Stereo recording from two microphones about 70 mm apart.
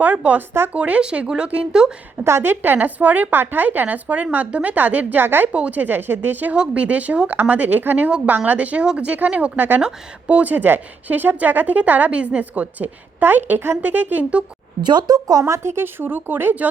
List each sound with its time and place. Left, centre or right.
0.0 s speech: centre
2.2 s speech: right
5.5 s speech: centre
14.8 s speech: right